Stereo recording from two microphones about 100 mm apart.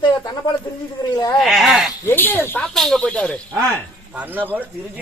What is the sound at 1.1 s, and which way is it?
Speech, 40° left (ahead or behind).